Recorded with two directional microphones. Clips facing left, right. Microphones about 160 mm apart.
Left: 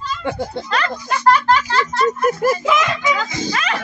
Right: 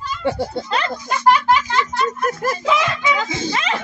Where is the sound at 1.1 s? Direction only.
10° right (ahead or behind).